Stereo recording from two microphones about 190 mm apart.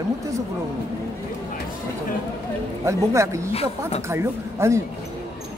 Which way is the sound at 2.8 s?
15° right (ahead or behind).